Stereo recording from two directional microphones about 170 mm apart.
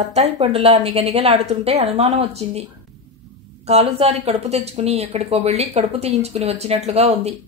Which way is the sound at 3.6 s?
40° right (ahead or behind).